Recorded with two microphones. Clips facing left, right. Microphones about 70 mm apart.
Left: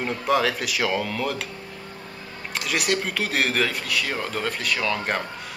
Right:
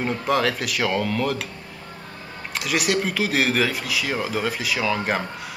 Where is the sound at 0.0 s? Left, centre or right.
Centre.